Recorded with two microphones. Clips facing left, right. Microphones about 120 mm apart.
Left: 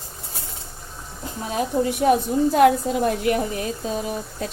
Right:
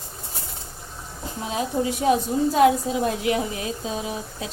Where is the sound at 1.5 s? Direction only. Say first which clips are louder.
Left 2 dB; 50° left (ahead or behind).